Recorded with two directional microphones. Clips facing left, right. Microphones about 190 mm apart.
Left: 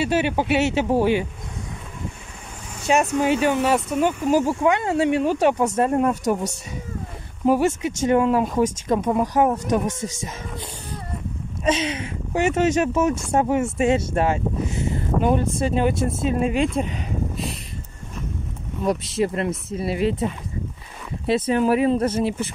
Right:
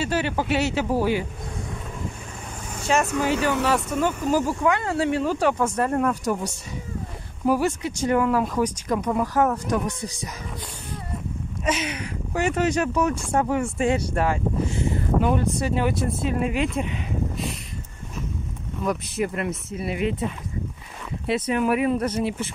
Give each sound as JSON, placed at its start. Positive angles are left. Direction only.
{"t": 0.0, "sound": "speech", "side_deg": 20}
{"t": 2.9, "sound": "speech", "side_deg": 20}
{"t": 11.6, "sound": "speech", "side_deg": 25}
{"t": 18.9, "sound": "speech", "side_deg": 30}
{"t": 21.3, "sound": "speech", "side_deg": 30}